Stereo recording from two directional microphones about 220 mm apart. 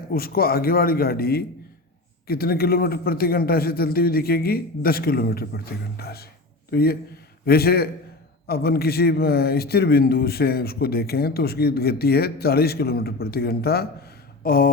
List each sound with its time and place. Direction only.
0.1 s a man's voice: 45° left (ahead or behind)